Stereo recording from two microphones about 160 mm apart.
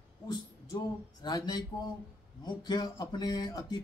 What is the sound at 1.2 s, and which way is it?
Speech, 25° left (ahead or behind).